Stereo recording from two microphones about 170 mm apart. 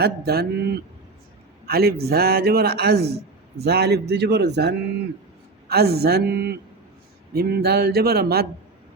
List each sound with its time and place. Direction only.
0.0 s a man's voice: 70° right (ahead or behind)
5.6 s a man's voice: 70° right (ahead or behind)